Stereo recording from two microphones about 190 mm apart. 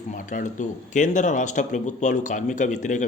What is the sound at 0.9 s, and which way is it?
Speech, 40° left (ahead or behind).